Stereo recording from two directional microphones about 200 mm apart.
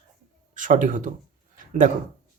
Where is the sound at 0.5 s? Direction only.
40° right (ahead or behind).